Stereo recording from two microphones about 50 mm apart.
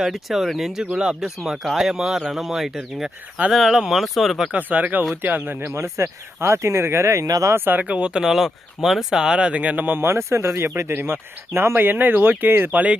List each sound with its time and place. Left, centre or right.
0.0 s speech: centre
4.5 s speech: right
5.7 s speech: right
7.5 s speech: right
7.8 s speech: right
8.2 s speech: centre
9.3 s speech: right
10.0 s speech: right
10.9 s speech: right
11.8 s speech: right
12.7 s speech: right